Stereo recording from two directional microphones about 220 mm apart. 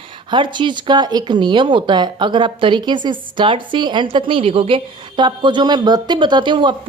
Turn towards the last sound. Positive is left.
turn(degrees=-20)  # may be behind; listen again after turning